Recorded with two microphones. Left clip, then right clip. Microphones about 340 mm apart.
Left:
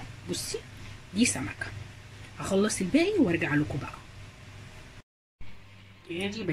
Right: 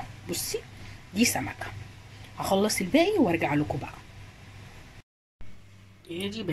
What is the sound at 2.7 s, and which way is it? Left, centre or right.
Speech, centre.